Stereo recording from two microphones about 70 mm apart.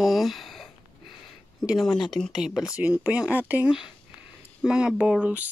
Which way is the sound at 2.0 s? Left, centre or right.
Centre.